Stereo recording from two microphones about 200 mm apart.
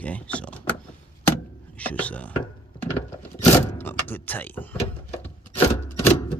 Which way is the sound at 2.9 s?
10° left (ahead or behind).